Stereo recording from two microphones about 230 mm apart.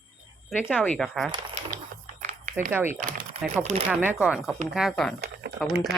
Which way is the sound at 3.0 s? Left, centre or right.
Right.